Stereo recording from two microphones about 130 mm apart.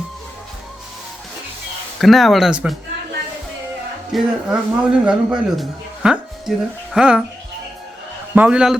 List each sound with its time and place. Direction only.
2.0 s speech: centre (ahead or behind)
4.1 s a man's voice: 5° right (ahead or behind)
8.4 s a man's voice: 5° right (ahead or behind)